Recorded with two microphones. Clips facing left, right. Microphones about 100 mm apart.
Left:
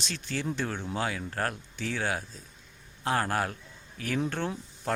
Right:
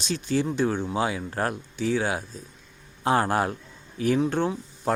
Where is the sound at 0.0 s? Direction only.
15° right (ahead or behind).